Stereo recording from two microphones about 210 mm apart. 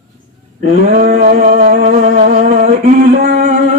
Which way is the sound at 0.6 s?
40° right (ahead or behind).